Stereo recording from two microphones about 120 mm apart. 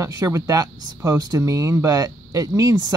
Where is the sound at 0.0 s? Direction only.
30° right (ahead or behind).